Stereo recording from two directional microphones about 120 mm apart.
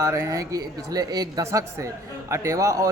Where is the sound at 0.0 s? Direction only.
25° right (ahead or behind).